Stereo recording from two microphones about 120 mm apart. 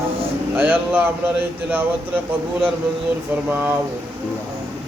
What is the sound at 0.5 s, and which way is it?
Speech, 15° right (ahead or behind).